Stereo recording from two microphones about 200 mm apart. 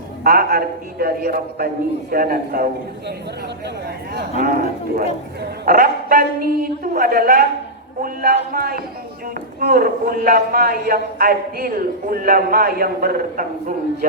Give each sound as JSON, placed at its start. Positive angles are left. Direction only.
{"t": 0.3, "sound": "a man's voice", "side_deg": -50}
{"t": 4.1, "sound": "a man's voice", "side_deg": -45}